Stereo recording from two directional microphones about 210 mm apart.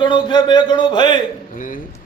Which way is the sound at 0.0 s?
20° left (ahead or behind).